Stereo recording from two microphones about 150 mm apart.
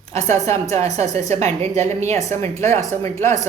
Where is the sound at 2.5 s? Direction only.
20° left (ahead or behind).